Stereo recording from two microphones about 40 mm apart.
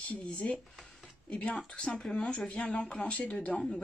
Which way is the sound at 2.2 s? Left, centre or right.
Left.